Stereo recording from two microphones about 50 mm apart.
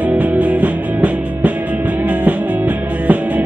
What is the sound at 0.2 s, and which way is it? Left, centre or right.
Music, right.